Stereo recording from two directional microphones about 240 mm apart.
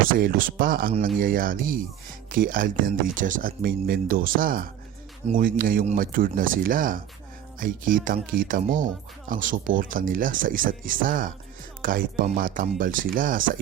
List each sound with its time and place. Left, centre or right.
0.1 s speech: right